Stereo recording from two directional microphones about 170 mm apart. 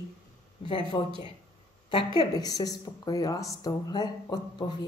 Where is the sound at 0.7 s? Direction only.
30° left (ahead or behind).